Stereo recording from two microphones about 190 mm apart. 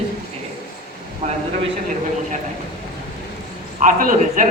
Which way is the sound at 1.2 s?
35° right (ahead or behind).